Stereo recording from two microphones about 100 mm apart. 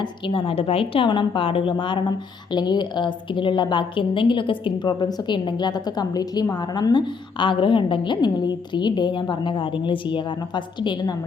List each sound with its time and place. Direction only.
0.0 s a woman's voice: 60° left (ahead or behind)